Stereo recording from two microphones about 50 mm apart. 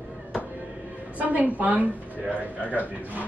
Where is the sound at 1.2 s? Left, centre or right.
Right.